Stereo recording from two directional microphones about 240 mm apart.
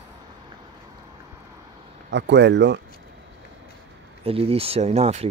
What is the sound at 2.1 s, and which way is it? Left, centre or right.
Speech, right.